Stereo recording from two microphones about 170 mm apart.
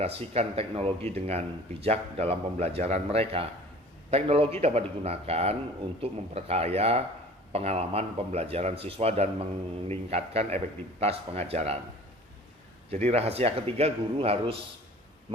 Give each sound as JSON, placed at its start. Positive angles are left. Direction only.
{"t": 0.0, "sound": "speech", "side_deg": -35}
{"t": 12.9, "sound": "speech", "side_deg": -35}